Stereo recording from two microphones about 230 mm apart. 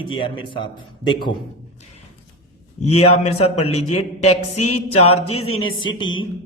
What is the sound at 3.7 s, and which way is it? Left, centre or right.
Speech, left.